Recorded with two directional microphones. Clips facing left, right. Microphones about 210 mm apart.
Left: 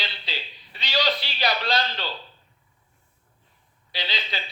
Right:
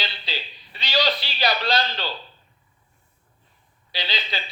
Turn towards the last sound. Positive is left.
turn(degrees=-35)  # may be behind; listen again after turning